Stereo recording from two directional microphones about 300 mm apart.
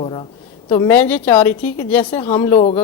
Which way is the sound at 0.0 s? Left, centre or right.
Centre.